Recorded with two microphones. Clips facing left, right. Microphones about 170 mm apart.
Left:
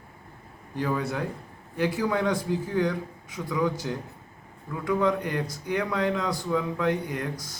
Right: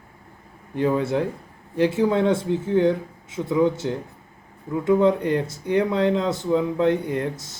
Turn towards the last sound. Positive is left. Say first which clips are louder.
# right 6 dB
turn(degrees=-25)  # may be behind; listen again after turning